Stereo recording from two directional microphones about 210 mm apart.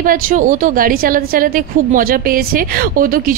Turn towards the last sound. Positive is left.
turn(degrees=-40)  # may be behind; listen again after turning